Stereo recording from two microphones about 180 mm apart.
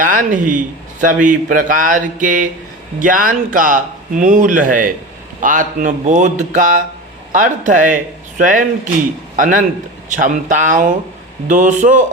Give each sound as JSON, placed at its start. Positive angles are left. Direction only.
{"t": 0.0, "sound": "a man's voice", "side_deg": -50}